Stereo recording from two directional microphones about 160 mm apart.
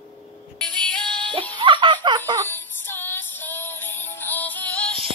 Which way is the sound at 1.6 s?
30° right (ahead or behind).